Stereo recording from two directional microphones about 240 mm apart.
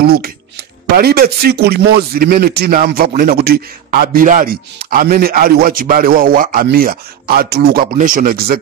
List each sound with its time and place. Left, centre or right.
0.0 s speech: right